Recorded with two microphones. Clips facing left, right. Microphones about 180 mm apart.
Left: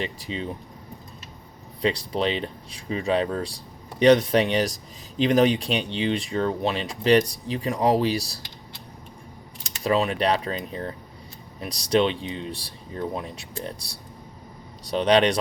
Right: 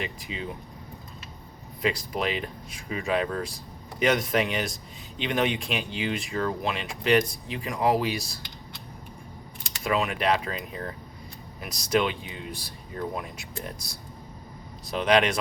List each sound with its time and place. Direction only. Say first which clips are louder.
0.0 s speech: left 4 dB; 30° left (ahead or behind)
1.8 s speech: left 4 dB; 30° left (ahead or behind)
9.8 s speech: left 3 dB; 35° left (ahead or behind)
14.8 s speech: left 3 dB; 35° left (ahead or behind)